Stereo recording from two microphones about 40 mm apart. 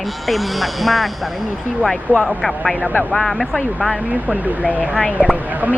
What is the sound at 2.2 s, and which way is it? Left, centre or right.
Speech, centre.